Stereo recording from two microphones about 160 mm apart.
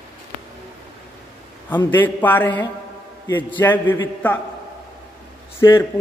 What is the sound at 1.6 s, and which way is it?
A man's voice, 10° left (ahead or behind).